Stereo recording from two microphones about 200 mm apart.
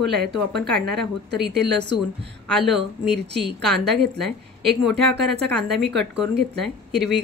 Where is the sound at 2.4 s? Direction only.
Centre (ahead or behind).